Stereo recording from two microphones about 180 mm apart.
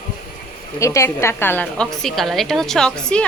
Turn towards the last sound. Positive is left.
turn(degrees=5)  # may be behind; listen again after turning